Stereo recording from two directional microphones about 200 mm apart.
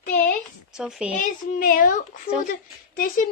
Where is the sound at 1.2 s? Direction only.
40° left (ahead or behind).